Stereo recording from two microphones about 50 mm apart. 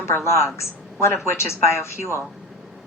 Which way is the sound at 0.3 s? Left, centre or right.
Left.